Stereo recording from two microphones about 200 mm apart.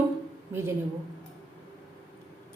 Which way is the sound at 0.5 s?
15° right (ahead or behind).